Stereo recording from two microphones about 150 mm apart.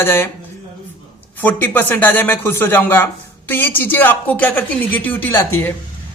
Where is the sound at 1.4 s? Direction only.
10° left (ahead or behind).